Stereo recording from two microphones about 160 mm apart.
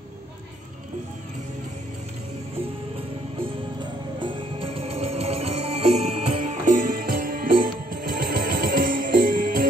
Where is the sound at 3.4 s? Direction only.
30° right (ahead or behind).